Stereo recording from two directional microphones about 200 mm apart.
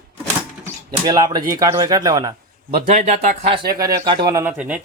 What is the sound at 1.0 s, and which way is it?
Speech, 20° right (ahead or behind).